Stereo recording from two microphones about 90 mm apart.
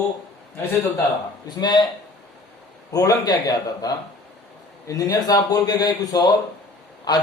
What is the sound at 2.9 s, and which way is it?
A man's voice, 40° left (ahead or behind).